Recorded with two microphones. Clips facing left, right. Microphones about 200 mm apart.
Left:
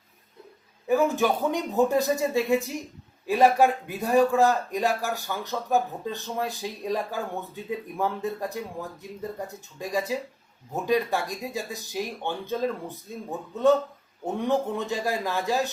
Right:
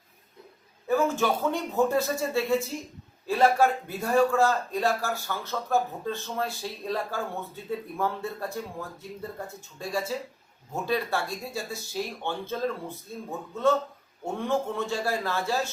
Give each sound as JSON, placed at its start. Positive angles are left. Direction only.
{"t": 0.9, "sound": "a man's voice", "side_deg": 15}